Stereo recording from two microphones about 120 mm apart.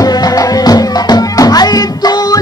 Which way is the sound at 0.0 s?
30° left (ahead or behind).